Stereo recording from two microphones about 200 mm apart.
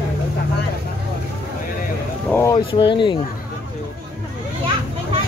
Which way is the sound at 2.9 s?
25° left (ahead or behind).